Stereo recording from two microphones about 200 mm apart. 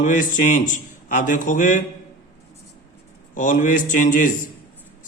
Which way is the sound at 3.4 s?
40° left (ahead or behind).